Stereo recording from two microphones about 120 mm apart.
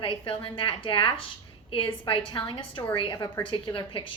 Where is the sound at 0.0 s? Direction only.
45° left (ahead or behind).